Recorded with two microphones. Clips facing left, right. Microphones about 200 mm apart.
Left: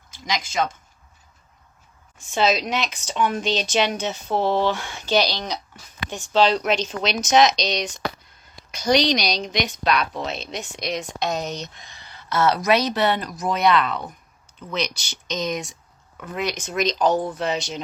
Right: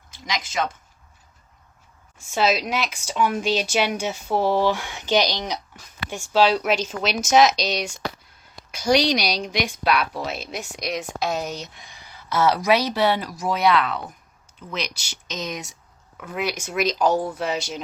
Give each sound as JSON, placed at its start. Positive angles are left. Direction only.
{"t": 0.1, "sound": "speech", "side_deg": 0}
{"t": 2.1, "sound": "speech", "side_deg": -5}